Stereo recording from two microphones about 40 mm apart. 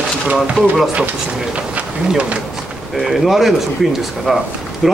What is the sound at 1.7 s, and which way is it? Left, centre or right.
Speech, right.